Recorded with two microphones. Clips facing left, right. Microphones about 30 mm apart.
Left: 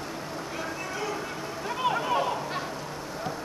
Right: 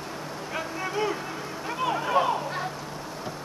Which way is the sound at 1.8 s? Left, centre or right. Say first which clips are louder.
Even; centre.